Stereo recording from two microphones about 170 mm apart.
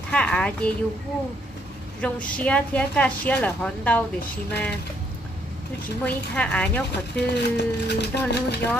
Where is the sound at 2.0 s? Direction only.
10° left (ahead or behind).